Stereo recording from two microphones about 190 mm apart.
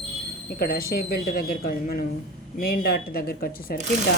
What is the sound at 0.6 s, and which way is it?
Speech, 50° left (ahead or behind).